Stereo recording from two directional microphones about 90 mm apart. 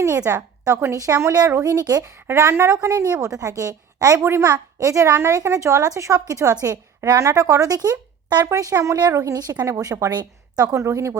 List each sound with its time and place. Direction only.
0.3 s a woman's voice: 30° right (ahead or behind); by 2.0 s 45° right (ahead or behind)
2.2 s a woman's voice: 30° right (ahead or behind)